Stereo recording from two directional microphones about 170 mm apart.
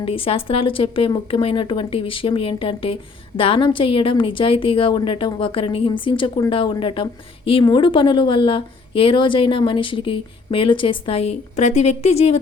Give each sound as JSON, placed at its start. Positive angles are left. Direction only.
{"t": 0.0, "sound": "speech", "side_deg": 35}